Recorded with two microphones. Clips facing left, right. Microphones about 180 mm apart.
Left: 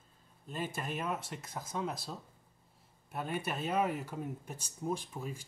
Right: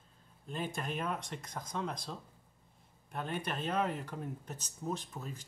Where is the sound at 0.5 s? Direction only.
5° left (ahead or behind).